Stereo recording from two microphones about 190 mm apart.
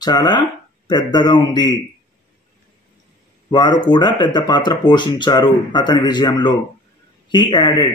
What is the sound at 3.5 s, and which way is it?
Speech, 25° left (ahead or behind).